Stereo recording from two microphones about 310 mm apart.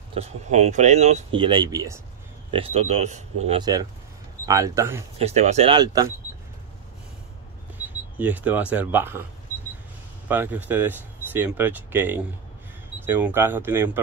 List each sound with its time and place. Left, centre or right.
0.1 s speech: right
5.2 s speech: right
8.2 s speech: centre
10.2 s speech: centre